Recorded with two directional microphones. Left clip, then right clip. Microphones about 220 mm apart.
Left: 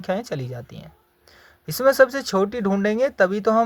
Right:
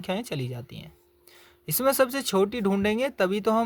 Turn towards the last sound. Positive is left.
turn(degrees=-30)  # may be behind; listen again after turning